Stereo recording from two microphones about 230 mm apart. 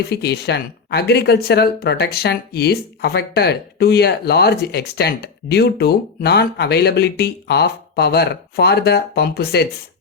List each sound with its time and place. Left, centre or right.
0.1 s speech: left